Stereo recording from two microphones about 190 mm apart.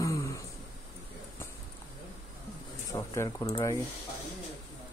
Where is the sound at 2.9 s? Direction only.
15° left (ahead or behind).